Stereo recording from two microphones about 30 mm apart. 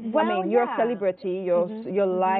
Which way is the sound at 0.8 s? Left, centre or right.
Centre.